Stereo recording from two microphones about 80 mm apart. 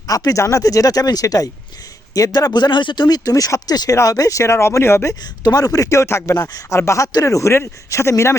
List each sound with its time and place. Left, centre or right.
0.1 s speech: left
5.2 s speech: left